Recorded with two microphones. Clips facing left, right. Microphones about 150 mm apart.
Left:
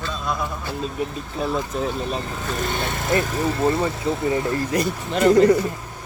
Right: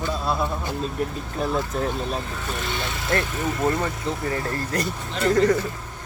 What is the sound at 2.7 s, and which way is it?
Speech, 50° left (ahead or behind).